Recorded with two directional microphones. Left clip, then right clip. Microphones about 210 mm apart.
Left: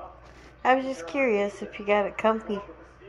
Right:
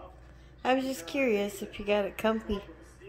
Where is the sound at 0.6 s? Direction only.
15° right (ahead or behind).